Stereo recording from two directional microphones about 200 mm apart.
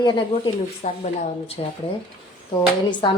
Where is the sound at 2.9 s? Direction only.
20° left (ahead or behind).